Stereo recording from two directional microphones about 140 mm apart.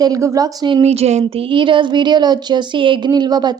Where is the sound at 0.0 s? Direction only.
25° right (ahead or behind).